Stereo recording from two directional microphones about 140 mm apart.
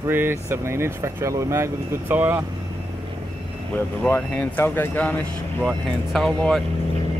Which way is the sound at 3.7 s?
10° left (ahead or behind).